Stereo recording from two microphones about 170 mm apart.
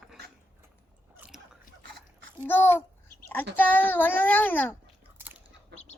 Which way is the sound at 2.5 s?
10° left (ahead or behind).